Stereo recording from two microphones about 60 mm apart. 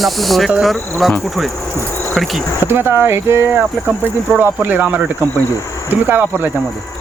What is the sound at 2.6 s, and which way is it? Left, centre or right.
Speech, right.